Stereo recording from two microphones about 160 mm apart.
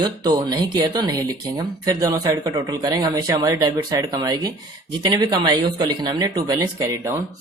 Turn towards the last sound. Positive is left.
turn(degrees=-20)  # may be behind; listen again after turning